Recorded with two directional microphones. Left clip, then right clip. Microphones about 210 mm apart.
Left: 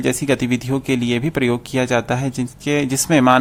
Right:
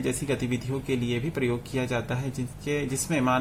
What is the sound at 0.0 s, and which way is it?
Speech, 40° left (ahead or behind).